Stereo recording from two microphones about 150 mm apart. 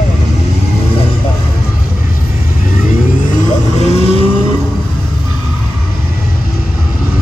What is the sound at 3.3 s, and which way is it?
Vehicle, 50° left (ahead or behind).